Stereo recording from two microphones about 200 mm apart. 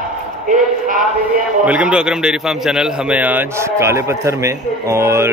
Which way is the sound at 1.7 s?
5° right (ahead or behind).